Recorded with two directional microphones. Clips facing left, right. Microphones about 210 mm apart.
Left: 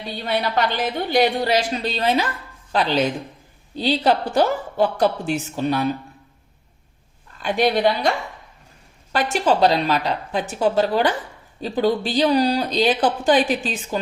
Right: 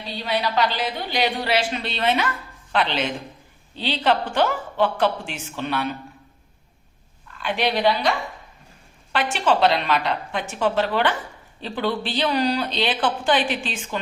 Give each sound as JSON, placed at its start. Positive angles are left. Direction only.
{"t": 0.3, "sound": "speech", "side_deg": 50}
{"t": 7.3, "sound": "speech", "side_deg": 45}
{"t": 9.1, "sound": "speech", "side_deg": 40}